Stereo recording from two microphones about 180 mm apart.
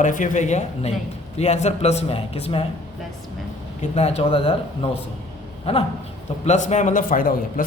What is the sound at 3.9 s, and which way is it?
Speech, 35° left (ahead or behind).